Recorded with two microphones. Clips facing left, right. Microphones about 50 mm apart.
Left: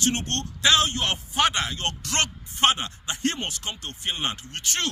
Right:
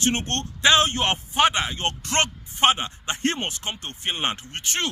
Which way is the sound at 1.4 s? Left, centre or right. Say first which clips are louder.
Right 3 dB; centre.